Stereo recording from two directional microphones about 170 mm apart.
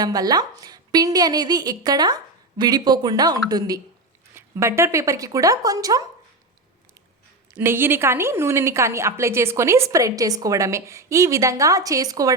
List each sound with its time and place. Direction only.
0.0 s a woman's voice: 20° right (ahead or behind)
7.5 s a woman's voice: 15° right (ahead or behind)